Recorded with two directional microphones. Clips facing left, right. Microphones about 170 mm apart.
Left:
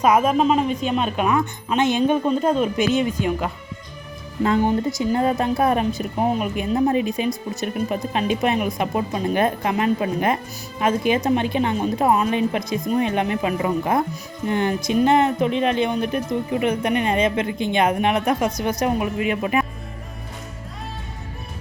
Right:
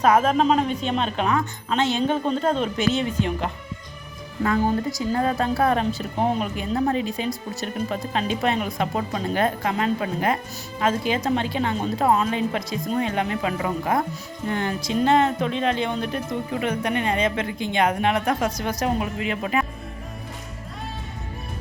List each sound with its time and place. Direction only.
0.0 s speech: 10° left (ahead or behind)
4.4 s speech: 25° left (ahead or behind)